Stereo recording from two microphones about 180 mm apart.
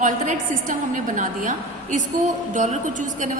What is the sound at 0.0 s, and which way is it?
A woman's voice, 45° right (ahead or behind).